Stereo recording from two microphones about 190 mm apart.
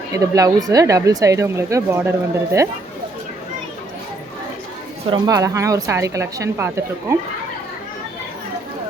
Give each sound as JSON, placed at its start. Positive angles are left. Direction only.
{"t": 0.2, "sound": "speech", "side_deg": -15}
{"t": 5.1, "sound": "speech", "side_deg": -20}